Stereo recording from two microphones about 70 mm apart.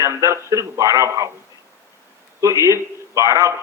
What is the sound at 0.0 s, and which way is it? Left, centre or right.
A man's voice, right.